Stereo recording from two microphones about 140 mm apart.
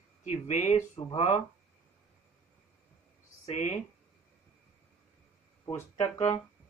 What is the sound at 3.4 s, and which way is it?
Speech, 55° left (ahead or behind).